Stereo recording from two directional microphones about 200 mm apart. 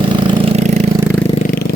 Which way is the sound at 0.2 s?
25° right (ahead or behind).